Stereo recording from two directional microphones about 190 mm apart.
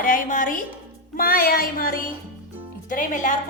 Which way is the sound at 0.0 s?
45° left (ahead or behind).